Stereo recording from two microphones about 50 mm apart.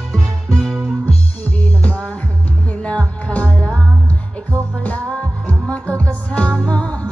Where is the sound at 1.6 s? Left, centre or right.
Left.